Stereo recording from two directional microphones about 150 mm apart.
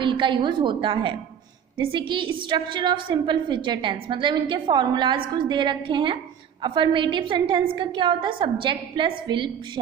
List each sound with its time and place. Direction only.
0.0 s a woman's voice: 30° right (ahead or behind)